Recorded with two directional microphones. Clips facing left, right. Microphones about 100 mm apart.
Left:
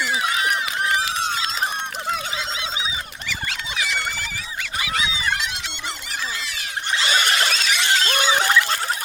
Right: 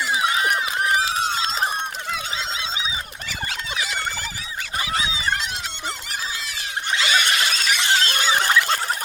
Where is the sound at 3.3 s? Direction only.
35° right (ahead or behind).